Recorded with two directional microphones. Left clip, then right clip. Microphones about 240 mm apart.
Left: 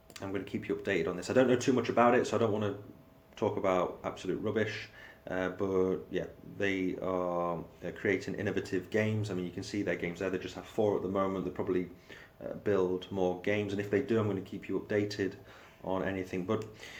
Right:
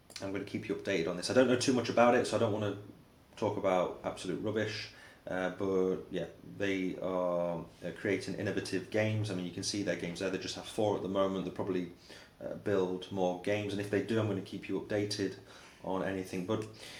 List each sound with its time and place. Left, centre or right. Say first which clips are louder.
0.2 s speech: left 1 dB; left